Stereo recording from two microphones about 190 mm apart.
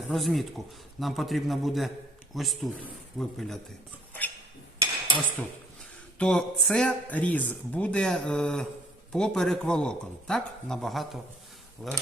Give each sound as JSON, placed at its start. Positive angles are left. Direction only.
{"t": 0.1, "sound": "speech", "side_deg": 0}
{"t": 4.8, "sound": "cutlery", "side_deg": -25}
{"t": 6.1, "sound": "speech", "side_deg": 5}